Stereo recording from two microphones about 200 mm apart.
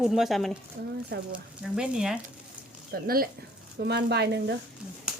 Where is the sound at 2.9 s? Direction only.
50° right (ahead or behind).